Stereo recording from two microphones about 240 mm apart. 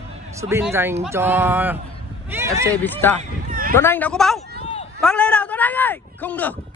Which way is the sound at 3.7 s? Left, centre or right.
Centre.